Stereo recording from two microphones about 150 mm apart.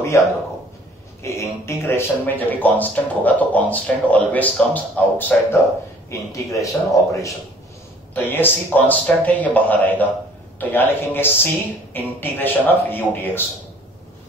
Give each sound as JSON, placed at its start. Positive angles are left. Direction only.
{"t": 0.1, "sound": "a man's voice", "side_deg": 20}